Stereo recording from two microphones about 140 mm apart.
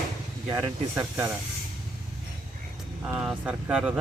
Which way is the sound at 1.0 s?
15° right (ahead or behind).